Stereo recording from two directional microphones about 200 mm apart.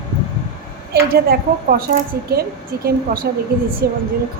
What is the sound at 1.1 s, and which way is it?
A woman's voice, 45° right (ahead or behind).